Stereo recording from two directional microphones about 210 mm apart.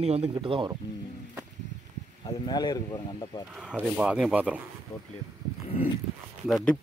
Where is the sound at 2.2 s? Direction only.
20° left (ahead or behind).